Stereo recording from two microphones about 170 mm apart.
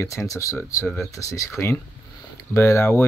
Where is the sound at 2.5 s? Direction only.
15° left (ahead or behind).